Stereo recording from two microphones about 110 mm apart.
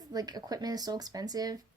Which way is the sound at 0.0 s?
35° right (ahead or behind).